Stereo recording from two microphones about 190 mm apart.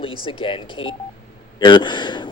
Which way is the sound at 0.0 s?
25° left (ahead or behind).